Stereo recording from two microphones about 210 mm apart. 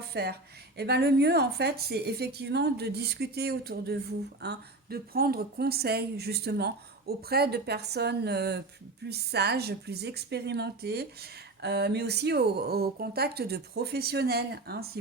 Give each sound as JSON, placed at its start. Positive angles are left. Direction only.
{"t": 0.1, "sound": "speech", "side_deg": -50}